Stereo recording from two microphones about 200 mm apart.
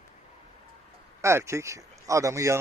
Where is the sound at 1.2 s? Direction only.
15° right (ahead or behind).